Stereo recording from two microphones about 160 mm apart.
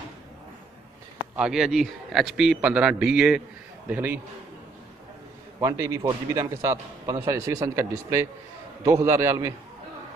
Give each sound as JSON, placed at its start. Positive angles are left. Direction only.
{"t": 1.3, "sound": "a man's voice", "side_deg": -5}
{"t": 5.6, "sound": "a man's voice", "side_deg": -20}